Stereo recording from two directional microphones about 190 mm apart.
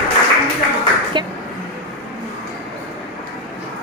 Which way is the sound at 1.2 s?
25° right (ahead or behind).